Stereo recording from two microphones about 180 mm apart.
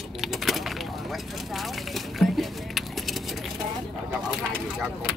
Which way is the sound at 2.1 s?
Centre (ahead or behind).